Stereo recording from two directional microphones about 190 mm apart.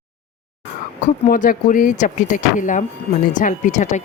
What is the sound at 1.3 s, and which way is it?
Speech, 45° left (ahead or behind).